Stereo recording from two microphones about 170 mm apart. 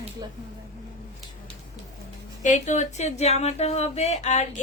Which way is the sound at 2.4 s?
45° left (ahead or behind).